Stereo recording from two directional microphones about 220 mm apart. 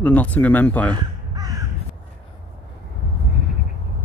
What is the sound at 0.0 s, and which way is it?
Speech, 5° left (ahead or behind).